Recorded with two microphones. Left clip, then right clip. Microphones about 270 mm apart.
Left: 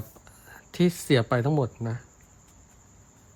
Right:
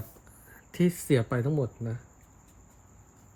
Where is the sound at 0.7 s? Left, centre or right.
Centre.